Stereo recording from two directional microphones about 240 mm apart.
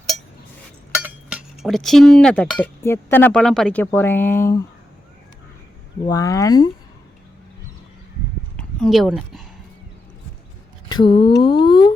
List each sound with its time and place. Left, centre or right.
0.9 s chink: centre
6.1 s speech: centre
8.5 s speech: centre
10.8 s speech: centre